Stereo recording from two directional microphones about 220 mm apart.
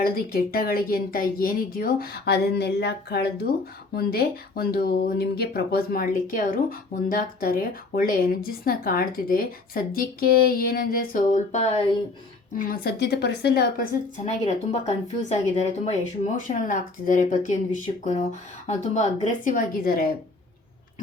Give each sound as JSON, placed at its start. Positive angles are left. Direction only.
{"t": 0.0, "sound": "speech", "side_deg": 40}
{"t": 12.5, "sound": "speech", "side_deg": 40}
{"t": 14.3, "sound": "speech", "side_deg": 30}